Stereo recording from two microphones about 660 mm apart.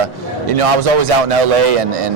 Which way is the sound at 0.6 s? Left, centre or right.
Right.